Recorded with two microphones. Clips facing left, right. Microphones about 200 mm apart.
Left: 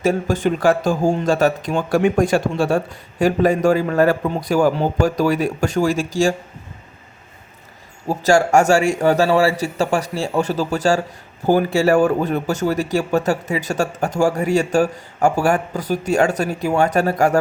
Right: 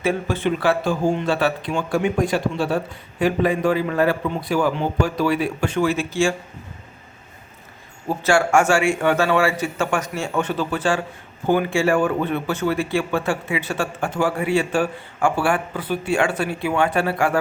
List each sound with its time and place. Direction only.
0.0 s speech: 45° left (ahead or behind)
8.0 s speech: 40° left (ahead or behind)